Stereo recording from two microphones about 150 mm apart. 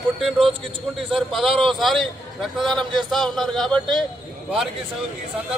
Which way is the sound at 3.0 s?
Centre (ahead or behind).